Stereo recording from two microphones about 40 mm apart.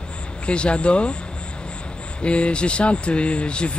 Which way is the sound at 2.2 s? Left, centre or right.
Left.